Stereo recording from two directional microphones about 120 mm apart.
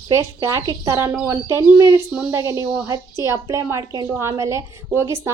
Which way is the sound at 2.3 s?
25° right (ahead or behind).